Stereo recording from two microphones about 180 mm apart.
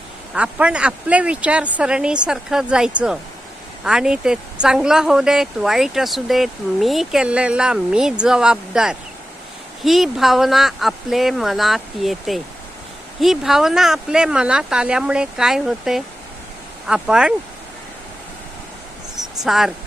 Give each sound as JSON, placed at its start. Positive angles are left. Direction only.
{"t": 0.3, "sound": "speech", "side_deg": -5}
{"t": 19.5, "sound": "speech", "side_deg": 0}